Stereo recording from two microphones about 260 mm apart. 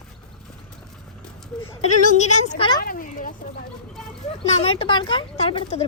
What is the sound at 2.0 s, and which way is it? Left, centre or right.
Speech, left.